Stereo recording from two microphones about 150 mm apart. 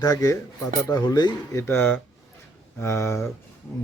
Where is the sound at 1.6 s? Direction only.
15° left (ahead or behind).